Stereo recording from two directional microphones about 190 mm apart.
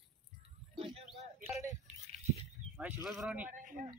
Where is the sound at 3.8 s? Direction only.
45° right (ahead or behind).